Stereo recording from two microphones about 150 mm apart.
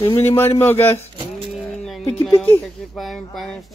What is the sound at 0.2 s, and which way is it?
Speech, 15° left (ahead or behind).